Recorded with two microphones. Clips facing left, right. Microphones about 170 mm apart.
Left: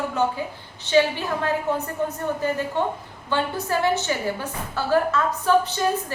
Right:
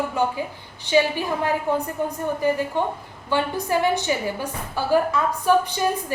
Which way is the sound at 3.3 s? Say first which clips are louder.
Right 2 dB; 15° right (ahead or behind).